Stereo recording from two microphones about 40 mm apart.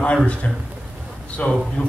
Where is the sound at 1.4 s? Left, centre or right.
Left.